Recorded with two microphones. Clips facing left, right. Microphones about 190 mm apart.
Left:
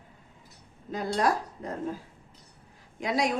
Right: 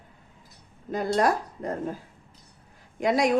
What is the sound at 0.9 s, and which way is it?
Speech, 50° right (ahead or behind).